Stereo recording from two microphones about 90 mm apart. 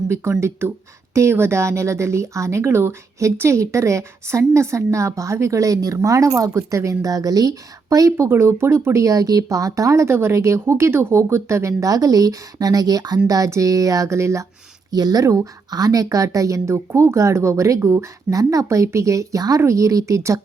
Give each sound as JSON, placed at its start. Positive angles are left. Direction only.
{"t": 0.1, "sound": "speech", "side_deg": -30}
{"t": 14.8, "sound": "speech", "side_deg": -45}